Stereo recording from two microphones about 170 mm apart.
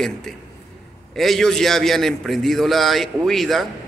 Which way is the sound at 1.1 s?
Centre (ahead or behind).